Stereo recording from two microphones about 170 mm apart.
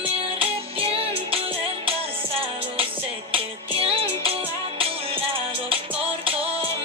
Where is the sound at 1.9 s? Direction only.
35° right (ahead or behind).